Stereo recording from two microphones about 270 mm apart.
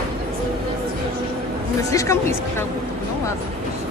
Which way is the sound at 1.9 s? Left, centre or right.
Centre.